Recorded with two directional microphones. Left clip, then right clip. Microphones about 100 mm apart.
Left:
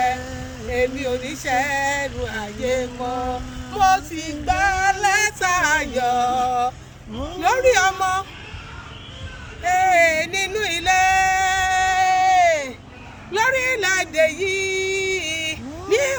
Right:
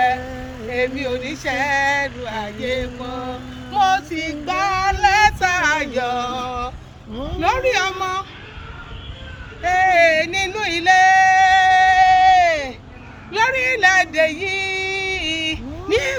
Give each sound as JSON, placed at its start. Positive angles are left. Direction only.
{"t": 0.7, "sound": "speech", "side_deg": 40}
{"t": 3.0, "sound": "mantra", "side_deg": -20}
{"t": 3.7, "sound": "female singing", "side_deg": 40}
{"t": 9.6, "sound": "music", "side_deg": 35}
{"t": 13.3, "sound": "a sound", "side_deg": 40}